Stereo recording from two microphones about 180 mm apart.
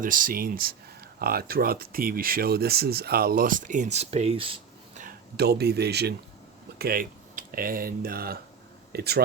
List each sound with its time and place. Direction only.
0.0 s speech: 50° right (ahead or behind); by 5.0 s 30° right (ahead or behind)
5.0 s speech: 60° right (ahead or behind)